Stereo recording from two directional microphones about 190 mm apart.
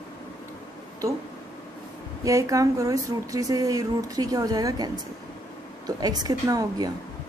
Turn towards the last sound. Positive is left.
turn(degrees=-20)  # may be behind; listen again after turning